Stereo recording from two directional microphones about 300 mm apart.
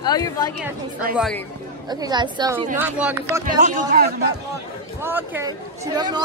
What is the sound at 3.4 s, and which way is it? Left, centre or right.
Speech, right.